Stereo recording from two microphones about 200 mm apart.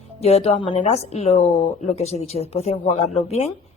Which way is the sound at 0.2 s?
30° left (ahead or behind).